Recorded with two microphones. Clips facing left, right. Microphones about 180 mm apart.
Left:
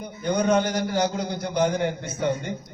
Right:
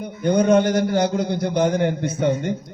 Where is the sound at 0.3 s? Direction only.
50° right (ahead or behind).